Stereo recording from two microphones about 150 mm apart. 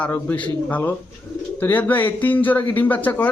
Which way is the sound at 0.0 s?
10° left (ahead or behind).